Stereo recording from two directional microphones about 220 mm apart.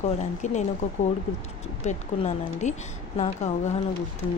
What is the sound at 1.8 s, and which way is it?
Speech, 30° left (ahead or behind).